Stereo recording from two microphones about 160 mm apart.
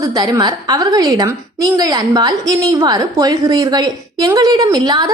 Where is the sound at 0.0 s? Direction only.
25° right (ahead or behind).